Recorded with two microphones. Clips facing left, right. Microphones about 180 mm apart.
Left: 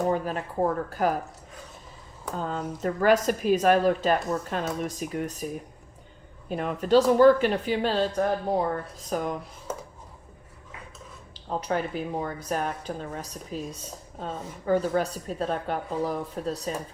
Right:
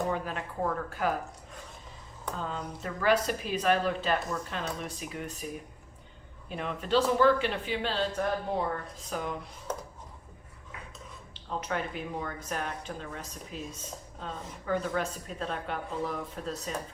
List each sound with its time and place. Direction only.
0.1 s speech: 40° left (ahead or behind)
2.3 s speech: 45° left (ahead or behind)
6.5 s speech: 45° left (ahead or behind)
9.7 s a sound: 10° left (ahead or behind)
11.3 s speech: 35° left (ahead or behind)